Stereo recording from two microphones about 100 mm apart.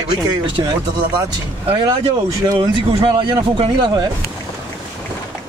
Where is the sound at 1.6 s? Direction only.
55° right (ahead or behind).